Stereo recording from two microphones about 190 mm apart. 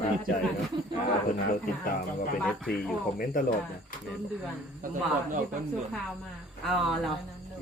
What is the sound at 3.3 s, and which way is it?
Speech, 45° left (ahead or behind).